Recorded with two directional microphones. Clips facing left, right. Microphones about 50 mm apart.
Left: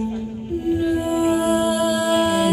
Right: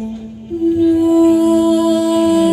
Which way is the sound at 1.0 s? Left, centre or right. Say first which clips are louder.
Right 9 dB; left.